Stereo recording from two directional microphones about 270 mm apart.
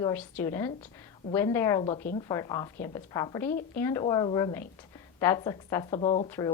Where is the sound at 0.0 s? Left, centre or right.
Centre.